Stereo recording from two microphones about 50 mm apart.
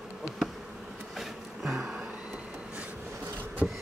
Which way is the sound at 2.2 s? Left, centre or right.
Centre.